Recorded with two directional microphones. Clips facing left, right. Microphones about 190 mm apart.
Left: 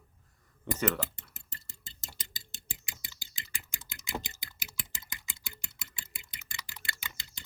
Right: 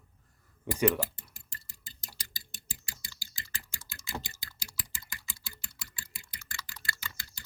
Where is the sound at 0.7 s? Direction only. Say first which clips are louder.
Even; 10° right (ahead or behind).